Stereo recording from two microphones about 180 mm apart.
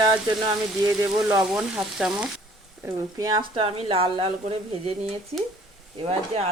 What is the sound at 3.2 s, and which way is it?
Speech, 25° right (ahead or behind).